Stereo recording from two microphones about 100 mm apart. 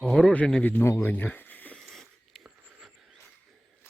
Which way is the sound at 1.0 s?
20° left (ahead or behind).